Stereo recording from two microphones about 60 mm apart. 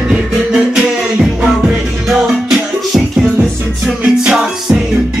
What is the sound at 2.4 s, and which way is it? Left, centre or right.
Music, centre.